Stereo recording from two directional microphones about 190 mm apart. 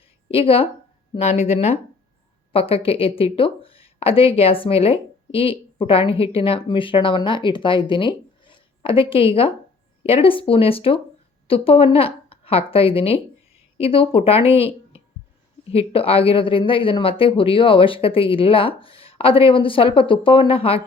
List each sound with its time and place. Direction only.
0.3 s a woman's voice: 30° left (ahead or behind)
15.7 s speech: 30° left (ahead or behind)